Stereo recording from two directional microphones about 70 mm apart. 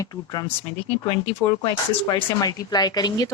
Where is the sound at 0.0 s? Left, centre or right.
Left.